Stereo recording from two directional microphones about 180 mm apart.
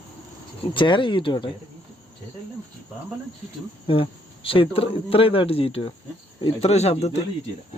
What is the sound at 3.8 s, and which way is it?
Speech, 30° left (ahead or behind).